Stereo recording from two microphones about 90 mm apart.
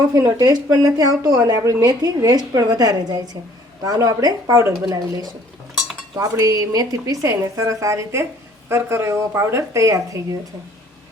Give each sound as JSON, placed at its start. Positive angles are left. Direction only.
{"t": 0.1, "sound": "a woman's voice", "side_deg": -40}
{"t": 6.1, "sound": "a woman's voice", "side_deg": -45}